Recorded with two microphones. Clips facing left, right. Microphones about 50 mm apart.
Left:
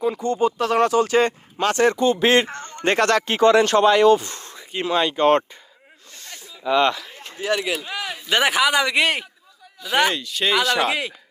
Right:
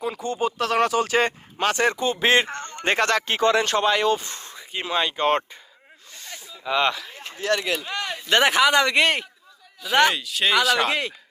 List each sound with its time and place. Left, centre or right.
0.2 s speech: centre; by 2.7 s right
2.8 s speech: right
3.2 s speech: left
4.4 s speech: right
6.7 s speech: right
7.4 s speech: centre